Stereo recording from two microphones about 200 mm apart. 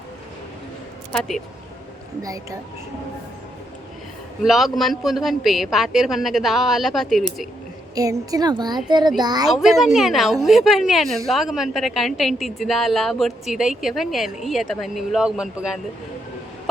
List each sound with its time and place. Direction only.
2.2 s speech: 15° right (ahead or behind)
4.4 s a woman's voice: centre (ahead or behind)
7.9 s a woman's voice: 20° right (ahead or behind)
9.5 s a woman's voice: centre (ahead or behind)